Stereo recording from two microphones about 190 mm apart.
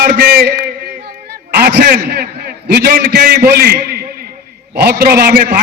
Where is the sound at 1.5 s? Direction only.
55° right (ahead or behind).